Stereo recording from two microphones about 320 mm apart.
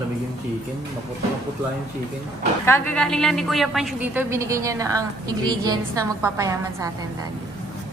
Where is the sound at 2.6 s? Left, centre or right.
Centre.